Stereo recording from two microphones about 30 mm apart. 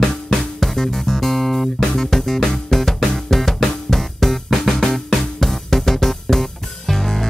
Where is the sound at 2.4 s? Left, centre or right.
Left.